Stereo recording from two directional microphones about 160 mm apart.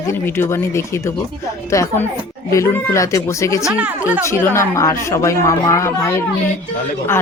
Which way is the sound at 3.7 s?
10° right (ahead or behind).